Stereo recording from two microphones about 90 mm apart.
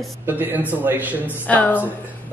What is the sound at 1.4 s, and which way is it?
Speech, 20° left (ahead or behind).